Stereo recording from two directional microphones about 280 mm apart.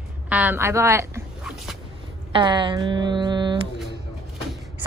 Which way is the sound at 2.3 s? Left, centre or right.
Centre.